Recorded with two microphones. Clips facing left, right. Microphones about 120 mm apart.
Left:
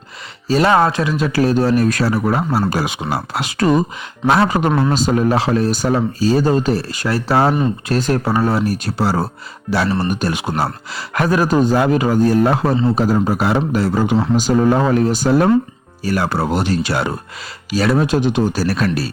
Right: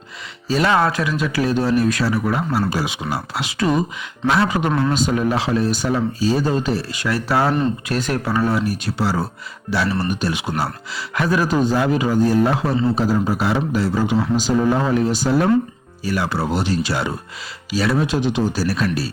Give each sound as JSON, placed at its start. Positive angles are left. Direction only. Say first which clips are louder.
{"t": 0.4, "sound": "speech", "louder": "left 4 dB", "side_deg": 40}
{"t": 0.7, "sound": "speech", "louder": "left 3 dB", "side_deg": 25}
{"t": 2.6, "sound": "speech", "louder": "left 3 dB", "side_deg": 50}
{"t": 4.8, "sound": "speech", "louder": "left 3 dB", "side_deg": 35}